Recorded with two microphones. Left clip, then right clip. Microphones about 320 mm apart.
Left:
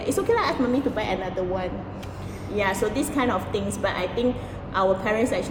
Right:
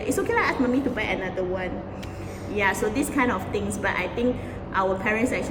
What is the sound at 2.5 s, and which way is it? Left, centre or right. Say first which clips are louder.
A woman's voice: even; centre.